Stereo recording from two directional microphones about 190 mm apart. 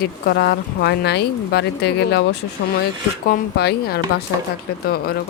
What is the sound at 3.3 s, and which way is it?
Speech, 55° left (ahead or behind).